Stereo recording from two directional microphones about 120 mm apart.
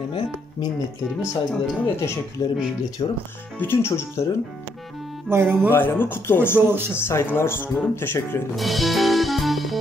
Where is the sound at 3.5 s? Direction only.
20° left (ahead or behind).